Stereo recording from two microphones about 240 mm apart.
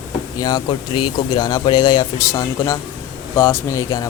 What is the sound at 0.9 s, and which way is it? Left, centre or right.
Speech, left.